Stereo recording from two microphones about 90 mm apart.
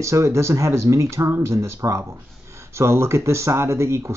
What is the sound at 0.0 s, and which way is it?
Speech, 35° right (ahead or behind).